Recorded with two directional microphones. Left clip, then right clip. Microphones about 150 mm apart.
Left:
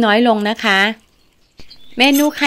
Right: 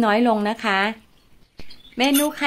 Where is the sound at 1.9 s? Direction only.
35° left (ahead or behind).